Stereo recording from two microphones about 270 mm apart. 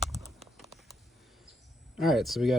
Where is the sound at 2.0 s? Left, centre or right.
Centre.